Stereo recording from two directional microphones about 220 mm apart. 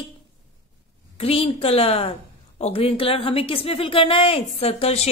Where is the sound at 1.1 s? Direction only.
25° left (ahead or behind).